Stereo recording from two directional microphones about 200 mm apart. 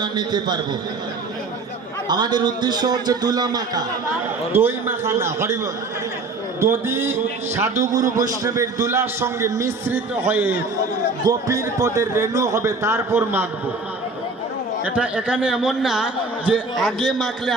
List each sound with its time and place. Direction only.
0.0 s a man's voice: 20° right (ahead or behind)
2.0 s a man's voice: 20° right (ahead or behind)
6.6 s a man's voice: 10° right (ahead or behind)
14.8 s a man's voice: 5° right (ahead or behind)